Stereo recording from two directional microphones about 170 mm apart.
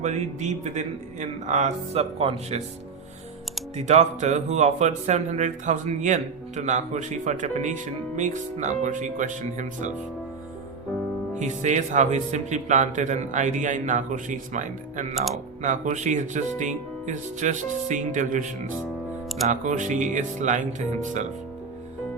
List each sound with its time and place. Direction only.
0.0 s speech: 45° right (ahead or behind)
3.8 s speech: 40° right (ahead or behind)
11.3 s speech: 45° right (ahead or behind)
15.1 s speech: centre (ahead or behind)
15.6 s speech: 50° right (ahead or behind)